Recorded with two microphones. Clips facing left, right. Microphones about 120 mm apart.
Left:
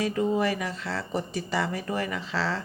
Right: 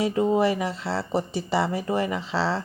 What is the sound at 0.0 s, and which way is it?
Speech, 25° right (ahead or behind).